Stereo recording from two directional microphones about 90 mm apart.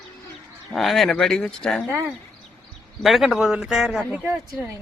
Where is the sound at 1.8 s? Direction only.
30° right (ahead or behind).